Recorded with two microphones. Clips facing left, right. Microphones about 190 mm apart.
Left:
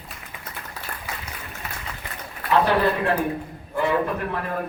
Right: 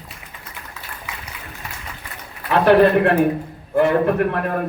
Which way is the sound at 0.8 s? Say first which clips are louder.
Left 2 dB; 35° left (ahead or behind).